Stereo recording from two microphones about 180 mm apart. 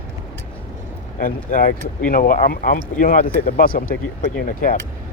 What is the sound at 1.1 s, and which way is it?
Speech, 50° left (ahead or behind).